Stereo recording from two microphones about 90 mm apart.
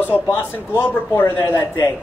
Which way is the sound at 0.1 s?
25° left (ahead or behind).